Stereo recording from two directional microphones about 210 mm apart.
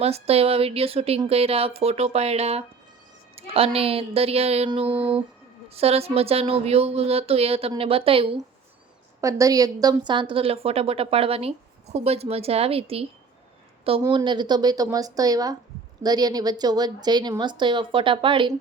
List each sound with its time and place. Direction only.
0.0 s a woman's voice: 30° right (ahead or behind)